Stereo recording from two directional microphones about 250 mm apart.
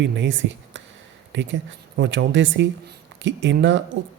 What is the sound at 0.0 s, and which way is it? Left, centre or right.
Speech, right.